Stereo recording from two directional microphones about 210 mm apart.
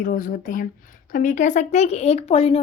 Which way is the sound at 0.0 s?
40° left (ahead or behind).